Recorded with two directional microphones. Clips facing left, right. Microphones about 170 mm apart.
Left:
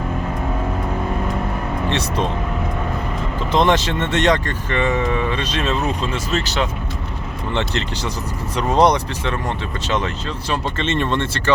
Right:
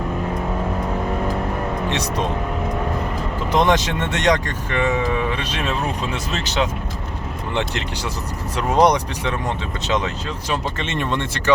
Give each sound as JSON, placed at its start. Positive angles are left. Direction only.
{"t": 1.9, "sound": "speech", "side_deg": -15}
{"t": 3.5, "sound": "speech", "side_deg": -10}
{"t": 10.5, "sound": "speech", "side_deg": -15}